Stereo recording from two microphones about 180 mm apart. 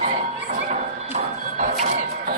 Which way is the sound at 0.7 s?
45° right (ahead or behind).